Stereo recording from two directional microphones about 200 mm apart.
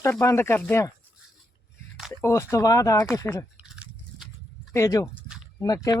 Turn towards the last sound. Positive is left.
turn(degrees=20)  # may be behind; listen again after turning